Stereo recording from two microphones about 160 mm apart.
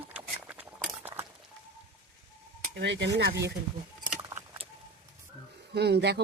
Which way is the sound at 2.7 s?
90° right.